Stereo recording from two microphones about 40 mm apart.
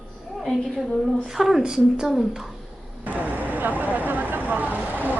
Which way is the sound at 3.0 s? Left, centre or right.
Right.